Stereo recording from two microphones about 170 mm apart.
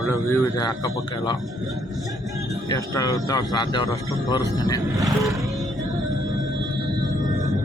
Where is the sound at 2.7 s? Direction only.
20° left (ahead or behind).